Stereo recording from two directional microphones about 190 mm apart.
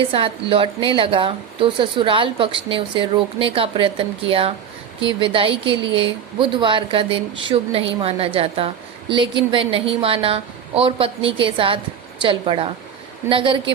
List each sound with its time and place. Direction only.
0.1 s a woman's voice: 30° right (ahead or behind)